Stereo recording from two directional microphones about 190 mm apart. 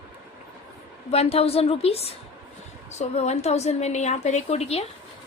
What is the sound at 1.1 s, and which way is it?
A woman's voice, 30° left (ahead or behind).